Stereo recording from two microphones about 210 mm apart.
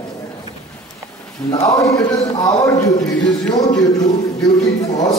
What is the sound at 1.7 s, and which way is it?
A man's voice, 15° left (ahead or behind).